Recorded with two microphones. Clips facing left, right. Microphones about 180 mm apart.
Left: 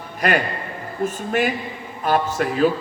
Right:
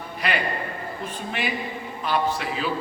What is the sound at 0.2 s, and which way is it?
A man's voice, 45° left (ahead or behind).